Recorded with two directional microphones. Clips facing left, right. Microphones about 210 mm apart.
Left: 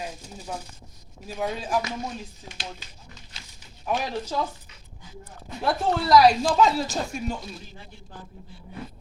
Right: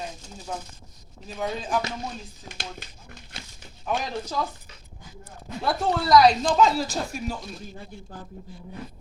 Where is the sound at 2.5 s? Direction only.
50° right (ahead or behind).